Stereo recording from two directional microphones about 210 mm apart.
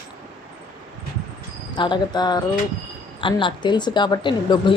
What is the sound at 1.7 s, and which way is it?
A woman's voice, 20° left (ahead or behind).